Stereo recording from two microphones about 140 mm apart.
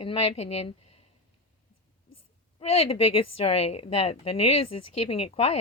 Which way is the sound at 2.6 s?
45° left (ahead or behind).